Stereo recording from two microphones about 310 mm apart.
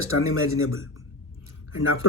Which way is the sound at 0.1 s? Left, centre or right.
Left.